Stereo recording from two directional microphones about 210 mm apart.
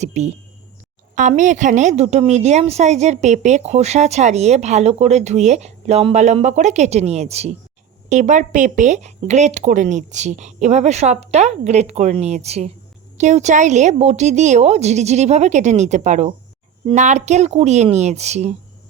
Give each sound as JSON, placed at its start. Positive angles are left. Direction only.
{"t": 0.0, "sound": "a woman's voice", "side_deg": -30}